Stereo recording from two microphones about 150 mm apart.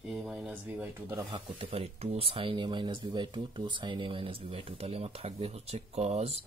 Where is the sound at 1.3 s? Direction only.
40° right (ahead or behind).